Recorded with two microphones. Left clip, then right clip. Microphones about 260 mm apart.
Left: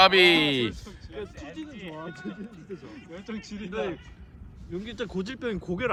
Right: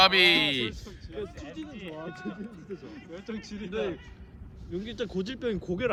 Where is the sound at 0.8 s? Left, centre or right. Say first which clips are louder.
Right 1 dB; left.